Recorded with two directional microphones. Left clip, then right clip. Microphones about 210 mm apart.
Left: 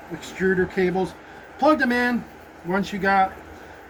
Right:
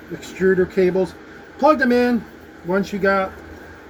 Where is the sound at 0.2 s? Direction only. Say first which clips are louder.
Right 5 dB; 10° left (ahead or behind).